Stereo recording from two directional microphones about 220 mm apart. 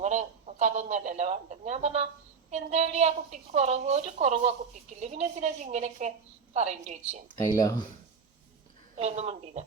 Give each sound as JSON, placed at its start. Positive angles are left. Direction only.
{"t": 0.0, "sound": "a woman's voice", "side_deg": -35}
{"t": 7.3, "sound": "speech", "side_deg": 15}
{"t": 9.0, "sound": "speech", "side_deg": -30}